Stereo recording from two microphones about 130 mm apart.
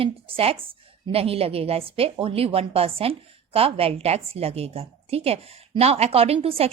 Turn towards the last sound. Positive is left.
turn(degrees=-50)  # may be behind; listen again after turning